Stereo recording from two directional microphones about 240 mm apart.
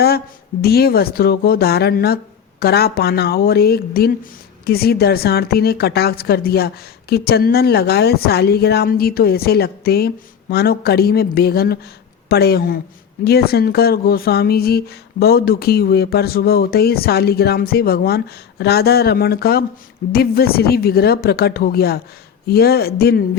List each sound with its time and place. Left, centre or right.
0.6 s speech: left